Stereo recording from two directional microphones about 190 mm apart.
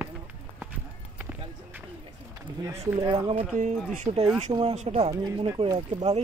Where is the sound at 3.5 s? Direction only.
40° right (ahead or behind).